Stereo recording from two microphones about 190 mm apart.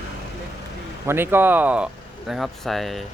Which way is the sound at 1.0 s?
10° right (ahead or behind).